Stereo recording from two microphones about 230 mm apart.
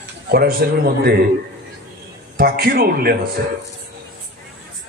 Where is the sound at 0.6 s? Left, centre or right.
Right.